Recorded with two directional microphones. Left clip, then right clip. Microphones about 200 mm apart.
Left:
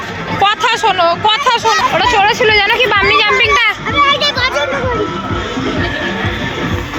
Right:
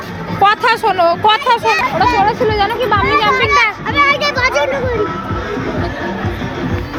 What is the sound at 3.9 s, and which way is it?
Children playing, 15° right (ahead or behind).